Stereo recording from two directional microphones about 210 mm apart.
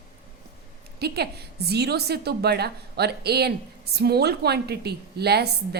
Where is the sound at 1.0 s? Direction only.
50° right (ahead or behind).